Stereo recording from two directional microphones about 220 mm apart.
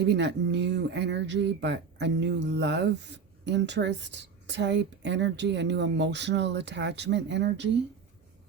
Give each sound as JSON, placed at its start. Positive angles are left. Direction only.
{"t": 0.0, "sound": "speech", "side_deg": -50}